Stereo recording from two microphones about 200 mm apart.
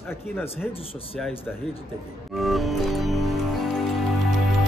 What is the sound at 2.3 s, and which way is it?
Music, centre (ahead or behind).